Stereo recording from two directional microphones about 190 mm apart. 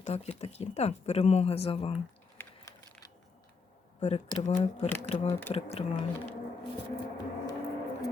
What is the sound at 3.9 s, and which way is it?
Speech, 35° left (ahead or behind).